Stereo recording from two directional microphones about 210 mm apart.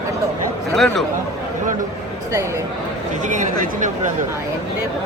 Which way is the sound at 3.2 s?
35° right (ahead or behind).